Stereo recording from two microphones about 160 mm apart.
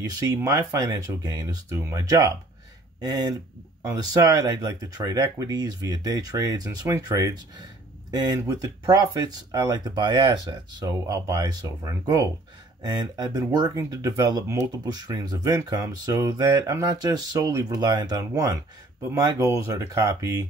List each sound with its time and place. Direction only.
0.2 s speech: 20° right (ahead or behind)